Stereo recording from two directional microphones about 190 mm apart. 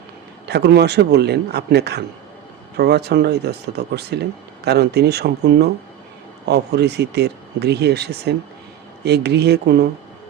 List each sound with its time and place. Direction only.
0.4 s speech: 60° right (ahead or behind)